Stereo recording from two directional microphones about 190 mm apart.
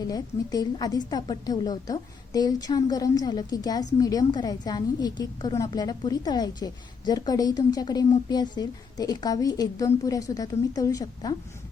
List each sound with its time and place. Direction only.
0.0 s a woman's voice: 20° left (ahead or behind)